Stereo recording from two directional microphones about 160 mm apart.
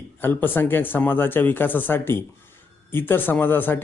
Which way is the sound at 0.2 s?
10° left (ahead or behind).